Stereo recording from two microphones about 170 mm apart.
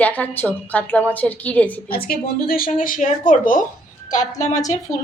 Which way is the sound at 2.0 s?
60° left (ahead or behind).